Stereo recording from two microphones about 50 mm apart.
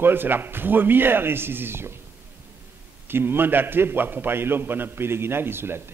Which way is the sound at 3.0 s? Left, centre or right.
Right.